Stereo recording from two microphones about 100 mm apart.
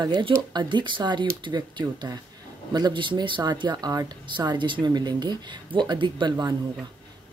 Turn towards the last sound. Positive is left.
turn(degrees=-45)  # may be behind; listen again after turning